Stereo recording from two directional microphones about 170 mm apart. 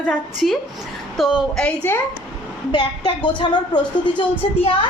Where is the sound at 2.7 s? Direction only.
25° left (ahead or behind).